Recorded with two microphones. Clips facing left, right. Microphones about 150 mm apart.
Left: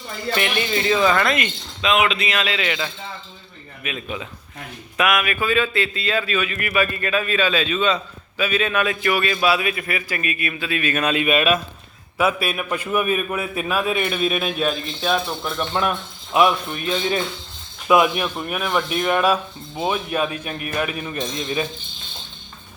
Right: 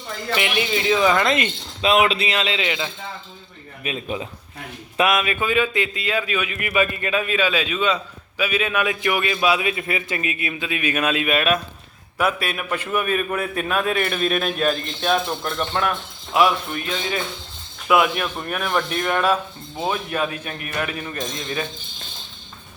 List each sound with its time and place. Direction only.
0.3 s a man's voice: 10° right (ahead or behind)
1.1 s a man's voice: 20° right (ahead or behind)
1.8 s a man's voice: 35° right (ahead or behind); by 2.9 s 20° right (ahead or behind)
3.8 s a man's voice: 30° right (ahead or behind); by 11.0 s 15° right (ahead or behind)
11.0 s a man's voice: centre (ahead or behind)
16.3 s a man's voice: 25° left (ahead or behind)